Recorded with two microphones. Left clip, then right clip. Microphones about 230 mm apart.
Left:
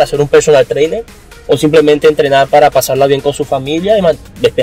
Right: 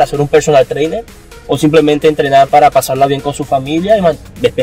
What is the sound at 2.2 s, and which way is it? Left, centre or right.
Speech, centre.